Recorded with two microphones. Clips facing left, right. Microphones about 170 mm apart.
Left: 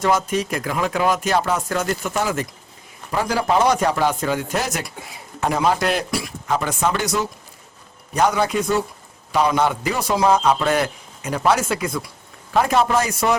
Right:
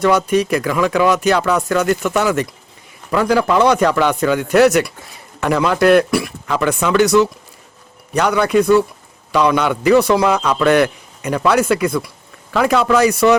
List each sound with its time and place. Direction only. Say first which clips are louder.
0.0 s a man's voice: right 6 dB; 65° right (ahead or behind)
9.3 s a man's voice: right 3 dB; 70° right (ahead or behind)
12.5 s a man's voice: right 4 dB; 85° right